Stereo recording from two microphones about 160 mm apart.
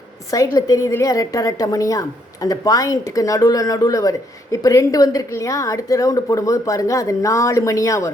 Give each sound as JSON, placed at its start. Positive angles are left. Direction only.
{"t": 0.3, "sound": "a woman's voice", "side_deg": 20}